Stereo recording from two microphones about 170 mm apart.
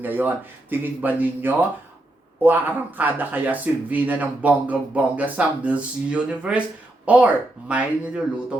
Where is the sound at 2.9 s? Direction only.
10° right (ahead or behind).